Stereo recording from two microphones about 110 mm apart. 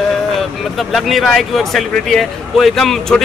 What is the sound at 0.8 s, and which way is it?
Speech, centre (ahead or behind).